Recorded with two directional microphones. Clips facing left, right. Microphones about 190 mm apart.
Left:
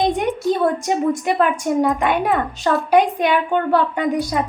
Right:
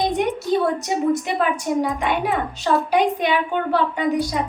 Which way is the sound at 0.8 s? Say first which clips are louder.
Left 1 dB; 50° left (ahead or behind).